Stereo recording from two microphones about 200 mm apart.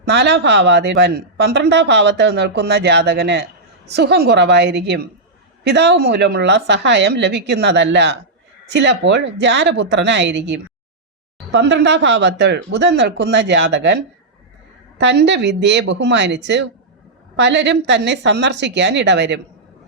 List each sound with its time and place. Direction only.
0.0 s speech: 55° right (ahead or behind)